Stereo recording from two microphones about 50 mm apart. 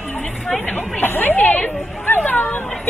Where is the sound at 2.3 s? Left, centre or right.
Left.